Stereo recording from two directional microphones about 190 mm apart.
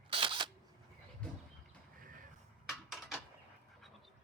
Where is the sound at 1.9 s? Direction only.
45° right (ahead or behind).